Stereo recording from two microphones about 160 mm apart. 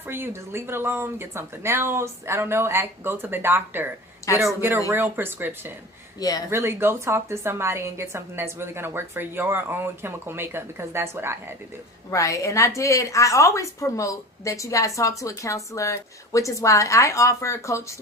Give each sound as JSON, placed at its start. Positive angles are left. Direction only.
{"t": 0.1, "sound": "a woman's voice", "side_deg": -15}
{"t": 6.1, "sound": "a woman's voice", "side_deg": 25}
{"t": 6.5, "sound": "a woman's voice", "side_deg": -15}
{"t": 12.1, "sound": "a woman's voice", "side_deg": 20}